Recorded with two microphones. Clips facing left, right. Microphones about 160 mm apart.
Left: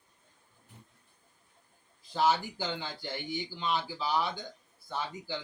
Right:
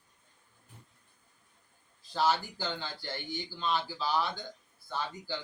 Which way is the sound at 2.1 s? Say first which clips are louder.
Left 1 dB; 15° left (ahead or behind).